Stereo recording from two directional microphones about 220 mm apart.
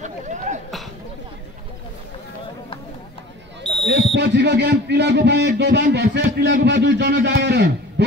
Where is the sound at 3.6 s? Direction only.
Centre (ahead or behind).